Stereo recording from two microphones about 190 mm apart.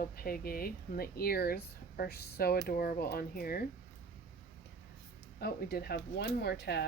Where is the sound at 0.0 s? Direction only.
50° left (ahead or behind).